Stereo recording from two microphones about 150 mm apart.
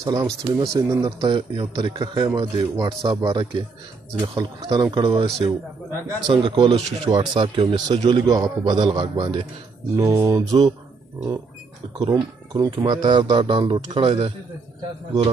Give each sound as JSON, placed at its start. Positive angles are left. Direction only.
{"t": 0.0, "sound": "speech", "side_deg": -25}
{"t": 9.9, "sound": "speech", "side_deg": -25}
{"t": 12.0, "sound": "speech", "side_deg": -25}